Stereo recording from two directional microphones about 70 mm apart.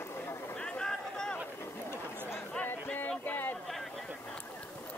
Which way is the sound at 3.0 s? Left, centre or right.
Left.